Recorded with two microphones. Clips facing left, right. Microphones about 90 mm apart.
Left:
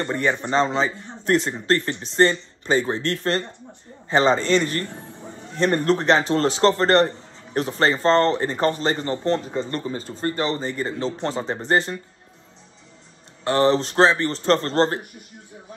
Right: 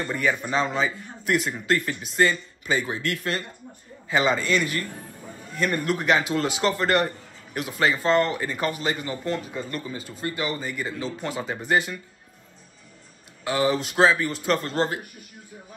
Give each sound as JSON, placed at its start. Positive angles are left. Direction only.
{"t": 0.0, "sound": "a man's voice", "side_deg": 30}
{"t": 13.4, "sound": "a man's voice", "side_deg": 35}